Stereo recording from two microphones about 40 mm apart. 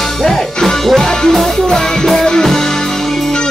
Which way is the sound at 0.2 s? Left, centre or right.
Centre.